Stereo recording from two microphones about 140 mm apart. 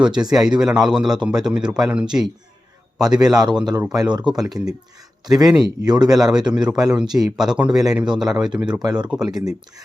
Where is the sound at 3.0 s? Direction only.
30° right (ahead or behind).